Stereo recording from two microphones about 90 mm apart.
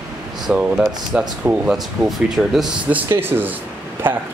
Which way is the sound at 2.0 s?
5° right (ahead or behind).